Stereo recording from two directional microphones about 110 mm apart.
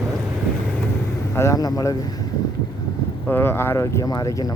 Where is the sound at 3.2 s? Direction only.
20° left (ahead or behind).